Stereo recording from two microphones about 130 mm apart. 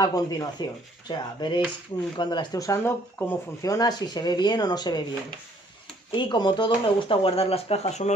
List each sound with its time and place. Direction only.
0.0 s speech: 30° left (ahead or behind)
6.1 s speech: 35° left (ahead or behind); by 8.1 s 50° left (ahead or behind)